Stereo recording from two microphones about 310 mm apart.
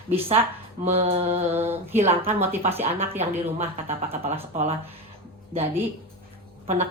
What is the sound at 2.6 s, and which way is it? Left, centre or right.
A woman's voice, centre.